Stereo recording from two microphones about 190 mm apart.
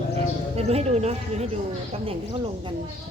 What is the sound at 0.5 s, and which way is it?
Speech, 35° right (ahead or behind).